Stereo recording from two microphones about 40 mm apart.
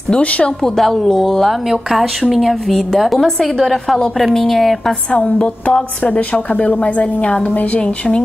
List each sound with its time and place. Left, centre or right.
0.7 s speech: centre
1.7 s speech: centre
5.4 s a sound: left
6.1 s a woman's voice: left